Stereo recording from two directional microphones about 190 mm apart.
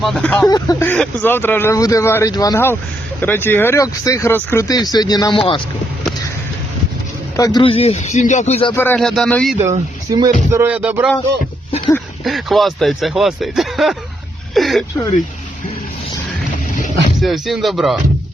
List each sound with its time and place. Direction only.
0.0 s speech: 5° left (ahead or behind)
0.4 s speech: 20° left (ahead or behind)
7.3 s speech: 20° left (ahead or behind)
8.7 s speech: 10° left (ahead or behind)
9.6 s speech: 15° right (ahead or behind)
10.5 s music: 10° right (ahead or behind)
12.2 s speech: centre (ahead or behind)
17.2 s speech: centre (ahead or behind)